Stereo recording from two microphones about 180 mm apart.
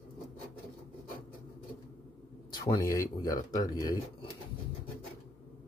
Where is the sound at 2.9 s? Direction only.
20° left (ahead or behind).